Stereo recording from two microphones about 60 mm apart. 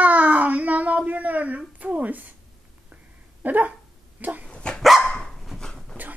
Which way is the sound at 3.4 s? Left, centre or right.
Right.